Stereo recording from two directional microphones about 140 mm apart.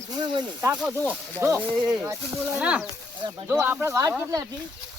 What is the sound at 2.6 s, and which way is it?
Speech, 10° right (ahead or behind).